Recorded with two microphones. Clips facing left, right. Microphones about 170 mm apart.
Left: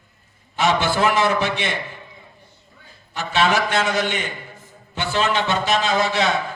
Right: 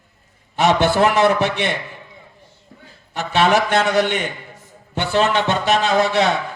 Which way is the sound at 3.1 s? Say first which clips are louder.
Right 3 dB; 60° right (ahead or behind).